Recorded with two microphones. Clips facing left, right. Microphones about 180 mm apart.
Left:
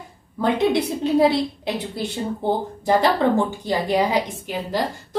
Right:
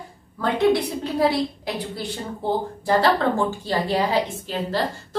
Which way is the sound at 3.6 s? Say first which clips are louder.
Left 2 dB; 15° left (ahead or behind).